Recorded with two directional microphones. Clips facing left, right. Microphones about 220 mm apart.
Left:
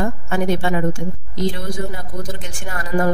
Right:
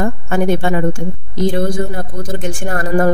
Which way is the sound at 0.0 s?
50° right (ahead or behind).